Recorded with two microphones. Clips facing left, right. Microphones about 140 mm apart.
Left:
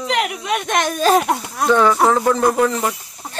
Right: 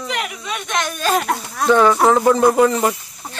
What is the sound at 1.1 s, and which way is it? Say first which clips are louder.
Speech: even; 20° left (ahead or behind).